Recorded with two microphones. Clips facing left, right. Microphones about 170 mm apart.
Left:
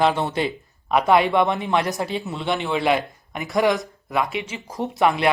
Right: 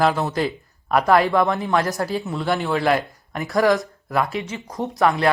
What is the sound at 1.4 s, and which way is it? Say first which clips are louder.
Speech: even; 20° left (ahead or behind).